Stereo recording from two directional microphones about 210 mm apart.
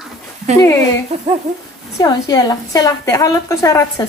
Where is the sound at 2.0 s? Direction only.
20° left (ahead or behind).